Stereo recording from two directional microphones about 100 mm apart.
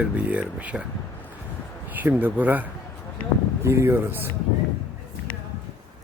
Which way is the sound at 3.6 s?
30° right (ahead or behind).